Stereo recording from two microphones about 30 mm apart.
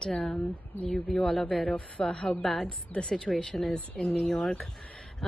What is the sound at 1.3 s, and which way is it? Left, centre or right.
Speech, left.